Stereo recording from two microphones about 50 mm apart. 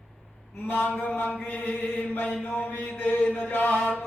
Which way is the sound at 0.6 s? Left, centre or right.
Left.